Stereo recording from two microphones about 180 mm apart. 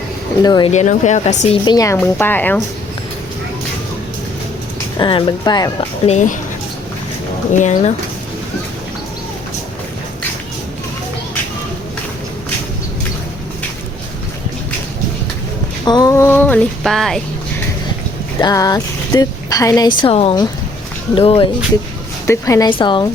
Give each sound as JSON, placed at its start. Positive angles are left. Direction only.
{"t": 0.4, "sound": "speech", "side_deg": 25}
{"t": 0.7, "sound": "speech", "side_deg": 40}
{"t": 1.6, "sound": "a woman's voice", "side_deg": 20}
{"t": 4.9, "sound": "speech", "side_deg": 25}
{"t": 6.1, "sound": "speech", "side_deg": 40}
{"t": 7.5, "sound": "speech", "side_deg": 45}
{"t": 15.8, "sound": "a woman's voice", "side_deg": 20}
{"t": 18.3, "sound": "speech", "side_deg": 20}
{"t": 20.0, "sound": "speech", "side_deg": 30}
{"t": 22.3, "sound": "a woman's voice", "side_deg": 15}